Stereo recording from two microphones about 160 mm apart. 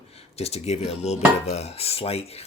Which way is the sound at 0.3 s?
40° left (ahead or behind).